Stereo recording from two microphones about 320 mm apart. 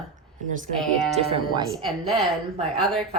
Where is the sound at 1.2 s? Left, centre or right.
Centre.